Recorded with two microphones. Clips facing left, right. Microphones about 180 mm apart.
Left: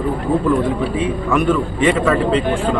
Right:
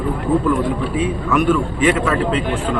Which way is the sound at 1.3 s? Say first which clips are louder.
Even; 5° right (ahead or behind).